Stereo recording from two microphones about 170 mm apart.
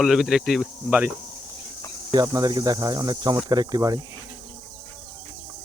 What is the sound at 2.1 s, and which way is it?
Speech, 25° right (ahead or behind).